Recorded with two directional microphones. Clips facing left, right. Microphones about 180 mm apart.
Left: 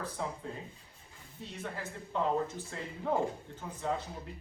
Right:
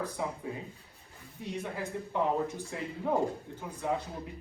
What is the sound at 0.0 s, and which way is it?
Speech, 15° right (ahead or behind).